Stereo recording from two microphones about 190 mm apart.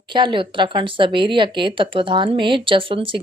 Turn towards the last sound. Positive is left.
turn(degrees=-25)  # may be behind; listen again after turning